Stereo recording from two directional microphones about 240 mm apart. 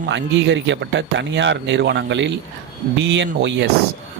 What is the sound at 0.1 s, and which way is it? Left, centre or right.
Speech, right.